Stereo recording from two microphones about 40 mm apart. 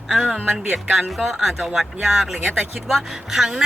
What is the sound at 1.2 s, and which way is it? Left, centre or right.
Speech, centre.